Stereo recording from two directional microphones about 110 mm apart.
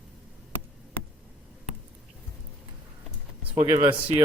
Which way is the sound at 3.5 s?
55° right (ahead or behind).